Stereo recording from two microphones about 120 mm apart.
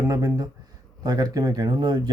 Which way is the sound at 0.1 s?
25° right (ahead or behind).